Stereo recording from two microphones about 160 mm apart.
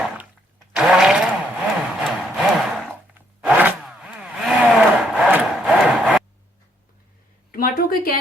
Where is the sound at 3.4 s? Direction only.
10° right (ahead or behind).